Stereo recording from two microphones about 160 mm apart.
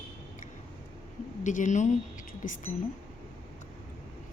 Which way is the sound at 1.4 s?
50° left (ahead or behind).